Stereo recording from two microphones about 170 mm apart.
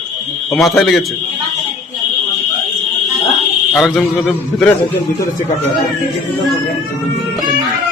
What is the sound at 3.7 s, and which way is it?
Speech, centre (ahead or behind).